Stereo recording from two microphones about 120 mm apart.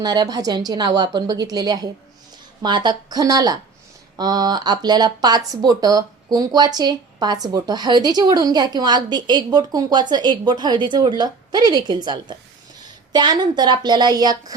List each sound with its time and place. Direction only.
0.0 s speech: 35° right (ahead or behind)